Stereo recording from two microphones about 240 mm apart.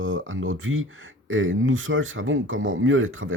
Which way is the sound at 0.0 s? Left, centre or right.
Right.